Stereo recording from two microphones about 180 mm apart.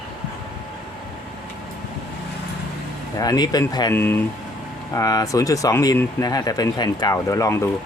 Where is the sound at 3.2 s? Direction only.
20° left (ahead or behind).